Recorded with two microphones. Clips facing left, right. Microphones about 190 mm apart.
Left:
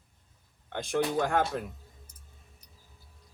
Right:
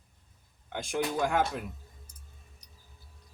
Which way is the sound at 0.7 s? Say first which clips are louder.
Left 3 dB; 60° left (ahead or behind).